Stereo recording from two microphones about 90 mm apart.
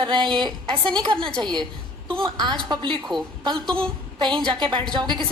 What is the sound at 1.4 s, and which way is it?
A woman's voice, 55° right (ahead or behind).